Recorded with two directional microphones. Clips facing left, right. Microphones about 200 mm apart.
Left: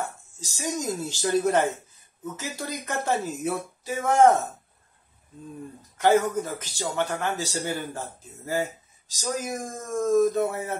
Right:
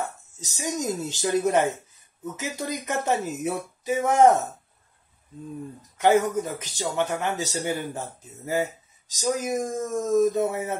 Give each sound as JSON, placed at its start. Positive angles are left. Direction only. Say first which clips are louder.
{"t": 0.4, "sound": "speech", "louder": "right 1 dB", "side_deg": -20}
{"t": 5.9, "sound": "speech", "louder": "right 1 dB", "side_deg": -20}